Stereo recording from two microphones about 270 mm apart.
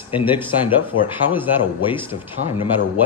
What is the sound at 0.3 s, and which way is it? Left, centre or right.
Speech, centre.